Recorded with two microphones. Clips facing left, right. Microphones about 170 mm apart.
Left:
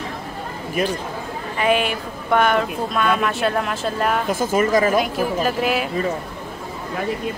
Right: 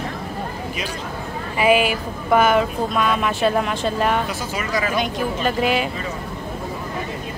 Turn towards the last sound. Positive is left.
turn(degrees=0)  # may be behind; listen again after turning